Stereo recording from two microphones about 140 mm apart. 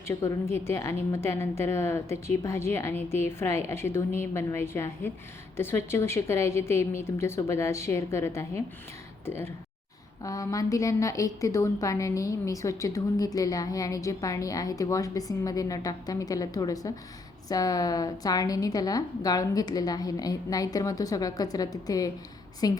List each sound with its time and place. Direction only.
0.1 s a woman's voice: 20° left (ahead or behind)